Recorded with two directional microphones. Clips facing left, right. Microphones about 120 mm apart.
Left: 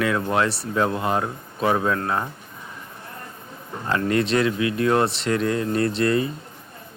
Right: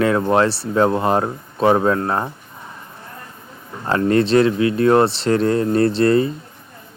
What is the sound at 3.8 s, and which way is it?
Speech, 35° right (ahead or behind).